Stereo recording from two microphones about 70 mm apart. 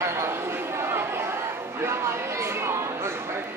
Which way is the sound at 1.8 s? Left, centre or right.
Right.